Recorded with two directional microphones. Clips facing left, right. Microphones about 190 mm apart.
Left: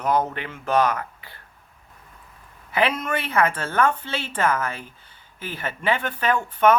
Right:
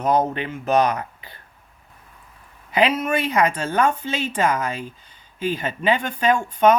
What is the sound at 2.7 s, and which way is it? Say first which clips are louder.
Speech: right 4 dB; 10° right (ahead or behind).